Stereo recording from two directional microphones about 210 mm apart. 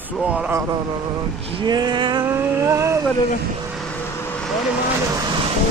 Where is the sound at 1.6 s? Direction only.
20° right (ahead or behind).